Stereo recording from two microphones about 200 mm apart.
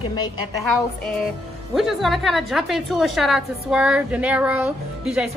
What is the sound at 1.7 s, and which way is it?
A woman's voice, centre (ahead or behind).